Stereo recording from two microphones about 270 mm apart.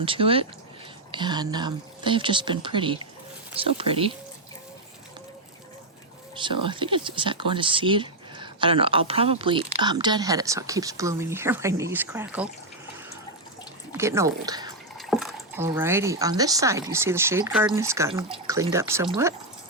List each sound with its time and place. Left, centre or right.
0.0 s speech: centre
6.3 s speech: centre
13.9 s speech: centre
14.9 s speech: centre